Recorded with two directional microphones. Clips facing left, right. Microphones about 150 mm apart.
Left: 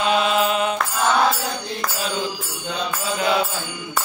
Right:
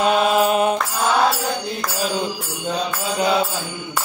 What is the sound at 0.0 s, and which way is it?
Mantra, 45° right (ahead or behind).